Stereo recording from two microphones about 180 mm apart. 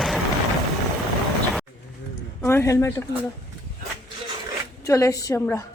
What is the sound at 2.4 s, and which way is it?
Speech, 15° left (ahead or behind).